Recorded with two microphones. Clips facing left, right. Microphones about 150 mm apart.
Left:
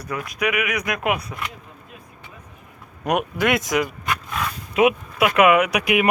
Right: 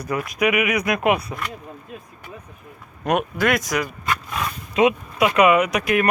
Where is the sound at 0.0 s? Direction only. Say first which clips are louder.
Right 3 dB; 10° right (ahead or behind).